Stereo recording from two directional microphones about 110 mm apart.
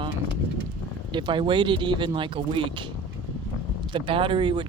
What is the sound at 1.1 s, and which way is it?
Speech, 45° right (ahead or behind).